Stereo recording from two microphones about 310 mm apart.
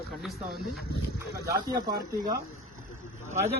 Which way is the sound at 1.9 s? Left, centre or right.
Right.